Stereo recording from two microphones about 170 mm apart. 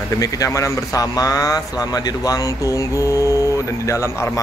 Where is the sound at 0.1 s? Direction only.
20° left (ahead or behind).